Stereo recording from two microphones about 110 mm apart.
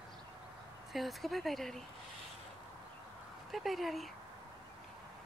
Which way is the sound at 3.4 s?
Centre (ahead or behind).